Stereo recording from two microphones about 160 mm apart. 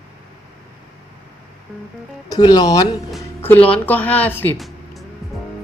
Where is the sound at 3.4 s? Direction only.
10° left (ahead or behind).